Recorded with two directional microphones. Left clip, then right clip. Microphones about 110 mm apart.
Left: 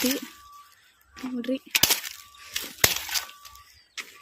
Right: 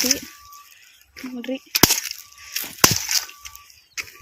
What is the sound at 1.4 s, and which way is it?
Speech, 40° left (ahead or behind).